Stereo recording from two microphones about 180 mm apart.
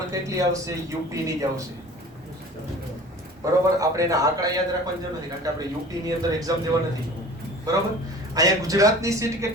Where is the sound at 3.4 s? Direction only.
15° right (ahead or behind).